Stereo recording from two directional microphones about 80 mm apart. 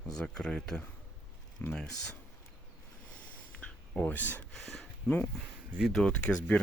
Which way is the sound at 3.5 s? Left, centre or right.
Centre.